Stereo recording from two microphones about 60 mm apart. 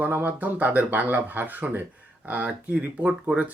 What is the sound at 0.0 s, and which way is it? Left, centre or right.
Speech, right.